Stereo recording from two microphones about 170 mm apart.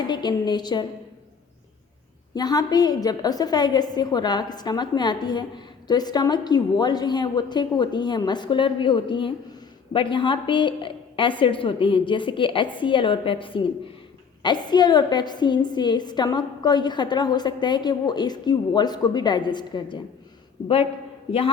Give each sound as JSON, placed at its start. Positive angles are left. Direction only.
{"t": 0.1, "sound": "a woman's voice", "side_deg": 25}
{"t": 2.3, "sound": "a woman's voice", "side_deg": 25}